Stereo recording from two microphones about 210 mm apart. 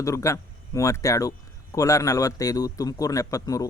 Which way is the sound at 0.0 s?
15° left (ahead or behind).